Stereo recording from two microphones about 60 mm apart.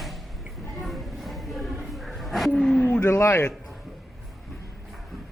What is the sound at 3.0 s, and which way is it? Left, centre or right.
Speech, left.